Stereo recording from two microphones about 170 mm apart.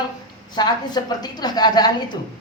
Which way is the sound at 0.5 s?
25° left (ahead or behind).